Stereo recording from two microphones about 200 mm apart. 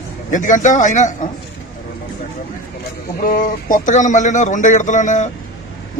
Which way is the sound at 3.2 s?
40° left (ahead or behind).